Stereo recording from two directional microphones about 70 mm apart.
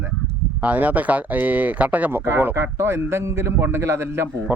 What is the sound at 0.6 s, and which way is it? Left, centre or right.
Speech, right.